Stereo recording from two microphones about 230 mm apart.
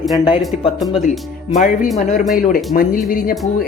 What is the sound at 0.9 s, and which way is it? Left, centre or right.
Speech, left.